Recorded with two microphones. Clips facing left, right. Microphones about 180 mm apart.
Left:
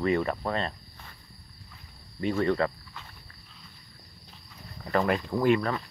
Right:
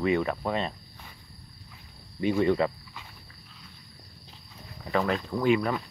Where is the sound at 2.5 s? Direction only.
10° right (ahead or behind).